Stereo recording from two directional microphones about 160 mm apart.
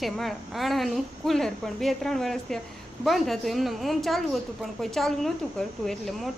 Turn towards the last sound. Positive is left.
turn(degrees=0)  # may be behind; listen again after turning